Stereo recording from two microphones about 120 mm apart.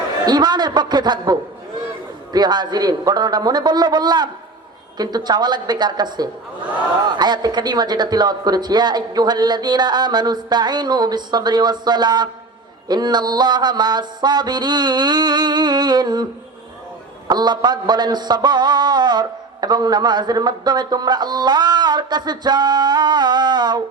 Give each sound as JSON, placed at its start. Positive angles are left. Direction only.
{"t": 0.3, "sound": "a woman's voice", "side_deg": -35}
{"t": 17.2, "sound": "a woman's voice", "side_deg": -35}